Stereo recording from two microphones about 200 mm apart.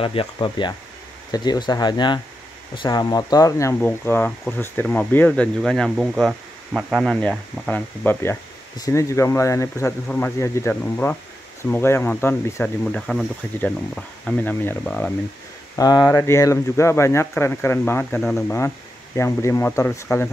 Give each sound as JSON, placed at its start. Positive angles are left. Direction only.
{"t": 0.0, "sound": "speech", "side_deg": 25}
{"t": 15.7, "sound": "speech", "side_deg": 20}